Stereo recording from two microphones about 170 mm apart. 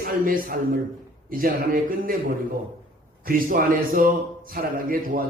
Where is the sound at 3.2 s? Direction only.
55° right (ahead or behind).